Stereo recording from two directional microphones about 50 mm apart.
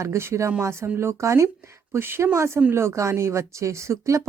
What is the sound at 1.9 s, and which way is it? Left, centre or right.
Speech, right.